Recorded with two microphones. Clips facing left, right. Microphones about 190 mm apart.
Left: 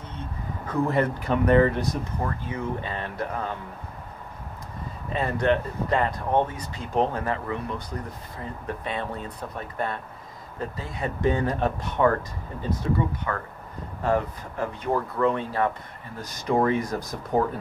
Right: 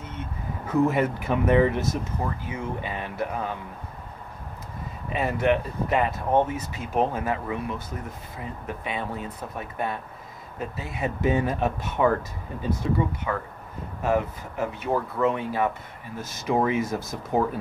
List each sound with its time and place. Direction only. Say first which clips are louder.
0.7 s speech: right 2 dB; 5° right (ahead or behind)
5.1 s speech: even; 10° right (ahead or behind)